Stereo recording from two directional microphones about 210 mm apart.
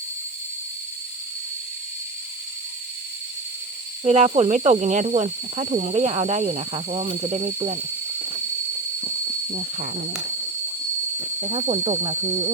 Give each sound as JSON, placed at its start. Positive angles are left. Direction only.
{"t": 4.0, "sound": "speech", "side_deg": -30}
{"t": 9.0, "sound": "a sound", "side_deg": -30}
{"t": 11.2, "sound": "speech", "side_deg": -30}